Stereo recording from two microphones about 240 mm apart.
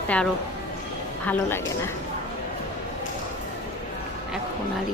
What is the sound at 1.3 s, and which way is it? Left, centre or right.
Speech, centre.